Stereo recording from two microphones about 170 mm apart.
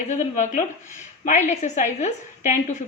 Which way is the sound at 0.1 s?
45° left (ahead or behind).